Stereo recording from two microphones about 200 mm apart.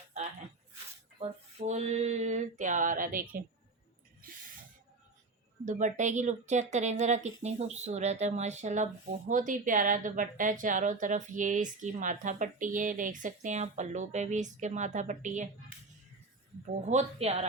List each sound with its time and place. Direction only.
1.2 s speech: 35° right (ahead or behind)
5.6 s speech: 40° right (ahead or behind)
16.6 s speech: 35° right (ahead or behind)